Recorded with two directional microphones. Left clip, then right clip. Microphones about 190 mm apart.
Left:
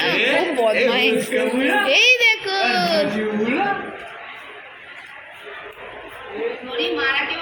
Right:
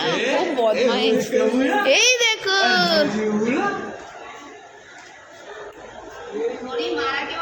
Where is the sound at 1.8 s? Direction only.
25° right (ahead or behind).